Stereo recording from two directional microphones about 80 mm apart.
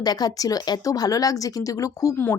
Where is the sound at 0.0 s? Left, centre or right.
Left.